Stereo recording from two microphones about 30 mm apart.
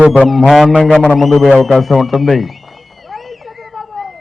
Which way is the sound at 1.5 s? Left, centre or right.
Centre.